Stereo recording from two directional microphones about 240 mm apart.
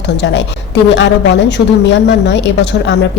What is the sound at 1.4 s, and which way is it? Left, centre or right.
Speech, left.